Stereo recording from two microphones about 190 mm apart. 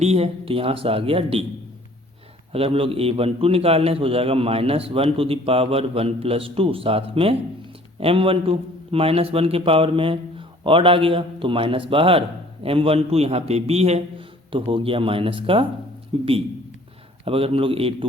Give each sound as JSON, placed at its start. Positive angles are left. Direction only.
{"t": 0.0, "sound": "a man's voice", "side_deg": -35}
{"t": 2.5, "sound": "a man's voice", "side_deg": -30}